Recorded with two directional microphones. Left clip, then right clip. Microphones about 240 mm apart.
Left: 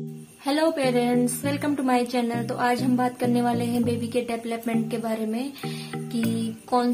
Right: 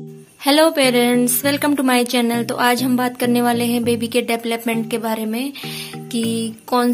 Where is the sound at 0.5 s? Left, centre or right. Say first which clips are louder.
Right 9 dB; centre.